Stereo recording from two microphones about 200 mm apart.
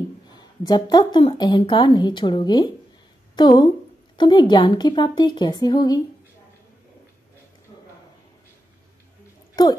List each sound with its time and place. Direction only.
0.3 s speech: 20° left (ahead or behind)
9.6 s speech: 20° left (ahead or behind)